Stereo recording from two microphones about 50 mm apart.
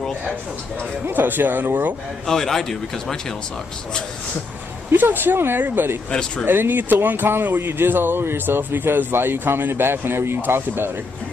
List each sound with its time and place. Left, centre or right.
1.0 s speech: right
2.2 s speech: centre
4.9 s speech: right